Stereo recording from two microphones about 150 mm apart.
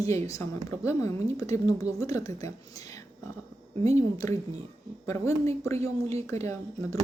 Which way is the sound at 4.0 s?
25° left (ahead or behind).